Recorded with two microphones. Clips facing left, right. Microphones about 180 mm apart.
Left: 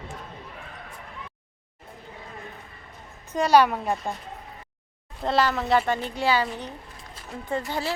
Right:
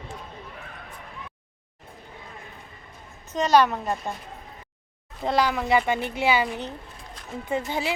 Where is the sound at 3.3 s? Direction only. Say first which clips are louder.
Left 1 dB; 10° left (ahead or behind).